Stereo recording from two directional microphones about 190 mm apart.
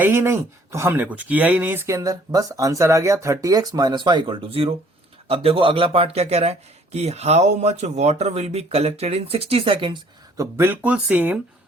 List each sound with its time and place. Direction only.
0.0 s speech: 10° right (ahead or behind)